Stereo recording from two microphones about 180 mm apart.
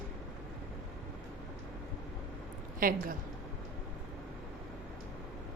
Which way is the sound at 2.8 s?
50° right (ahead or behind).